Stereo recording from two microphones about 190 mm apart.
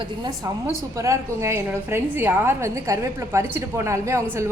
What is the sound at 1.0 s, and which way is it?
A woman's voice, 15° right (ahead or behind).